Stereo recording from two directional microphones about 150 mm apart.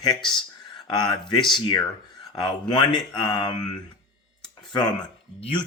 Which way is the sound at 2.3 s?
30° left (ahead or behind).